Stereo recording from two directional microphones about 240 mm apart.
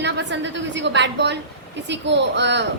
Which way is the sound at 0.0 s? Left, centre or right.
Right.